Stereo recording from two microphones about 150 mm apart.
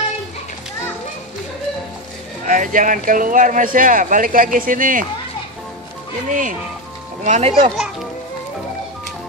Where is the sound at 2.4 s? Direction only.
60° right (ahead or behind).